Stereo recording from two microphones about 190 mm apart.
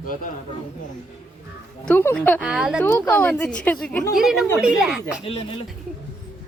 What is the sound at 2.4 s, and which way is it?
A woman's voice, centre (ahead or behind).